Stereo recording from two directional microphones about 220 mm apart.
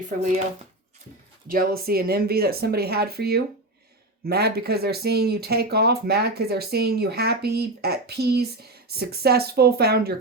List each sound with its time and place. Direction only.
0.2 s speech: 30° right (ahead or behind)
1.5 s speech: 40° right (ahead or behind)